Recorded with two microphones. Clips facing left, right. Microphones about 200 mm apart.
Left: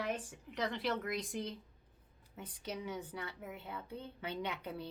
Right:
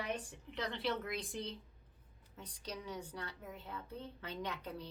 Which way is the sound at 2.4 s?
25° left (ahead or behind).